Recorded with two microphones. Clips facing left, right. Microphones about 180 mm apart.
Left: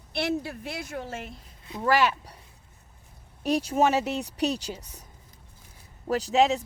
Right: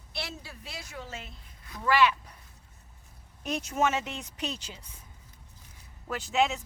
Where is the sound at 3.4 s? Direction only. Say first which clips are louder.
Left 6 dB; 35° left (ahead or behind).